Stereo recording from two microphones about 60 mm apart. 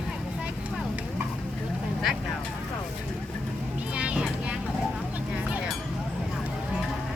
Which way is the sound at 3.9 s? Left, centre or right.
Centre.